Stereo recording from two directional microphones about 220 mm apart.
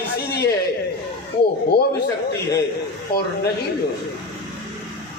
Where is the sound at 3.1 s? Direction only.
45° left (ahead or behind).